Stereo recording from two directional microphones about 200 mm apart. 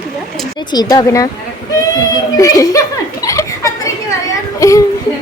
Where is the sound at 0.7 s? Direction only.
20° left (ahead or behind).